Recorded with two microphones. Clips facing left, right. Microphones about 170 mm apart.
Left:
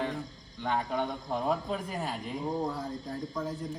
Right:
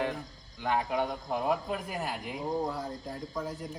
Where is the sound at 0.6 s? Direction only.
5° right (ahead or behind).